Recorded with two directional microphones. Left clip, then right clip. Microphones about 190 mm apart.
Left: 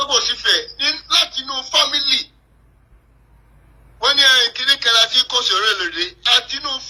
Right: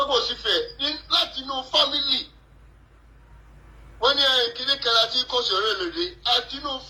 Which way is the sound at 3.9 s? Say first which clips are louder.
Left 7 dB; 45° left (ahead or behind).